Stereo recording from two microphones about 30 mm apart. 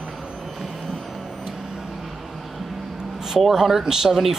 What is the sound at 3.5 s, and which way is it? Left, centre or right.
Speech, centre.